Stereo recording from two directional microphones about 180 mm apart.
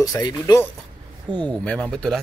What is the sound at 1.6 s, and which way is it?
Speech, 5° left (ahead or behind).